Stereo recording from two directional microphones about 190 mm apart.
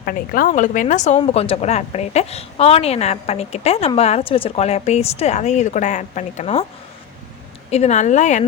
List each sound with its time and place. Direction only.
0.0 s a woman's voice: 50° left (ahead or behind)
7.7 s a woman's voice: 35° left (ahead or behind)